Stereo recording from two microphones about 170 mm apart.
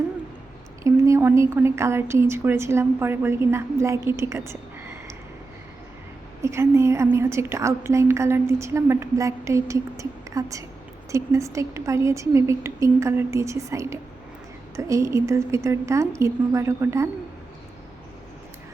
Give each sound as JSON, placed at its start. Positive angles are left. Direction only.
{"t": 0.9, "sound": "a woman's voice", "side_deg": -15}
{"t": 6.4, "sound": "a woman's voice", "side_deg": -15}